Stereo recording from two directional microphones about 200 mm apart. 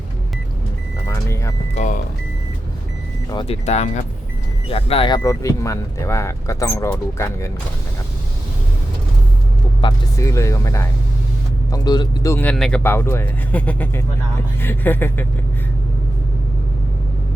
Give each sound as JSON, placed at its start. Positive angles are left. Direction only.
{"t": 1.0, "sound": "vehicle", "side_deg": 15}
{"t": 1.7, "sound": "speech", "side_deg": 40}
{"t": 3.2, "sound": "speech", "side_deg": 25}
{"t": 9.8, "sound": "speech", "side_deg": 15}